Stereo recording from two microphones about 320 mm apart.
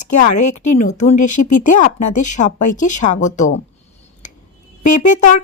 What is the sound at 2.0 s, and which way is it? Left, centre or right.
Speech, left.